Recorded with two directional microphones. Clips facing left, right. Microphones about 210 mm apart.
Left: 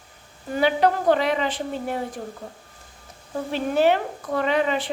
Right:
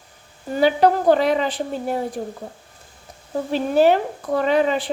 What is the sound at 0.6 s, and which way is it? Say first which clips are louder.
Speech: right 4 dB; 35° right (ahead or behind).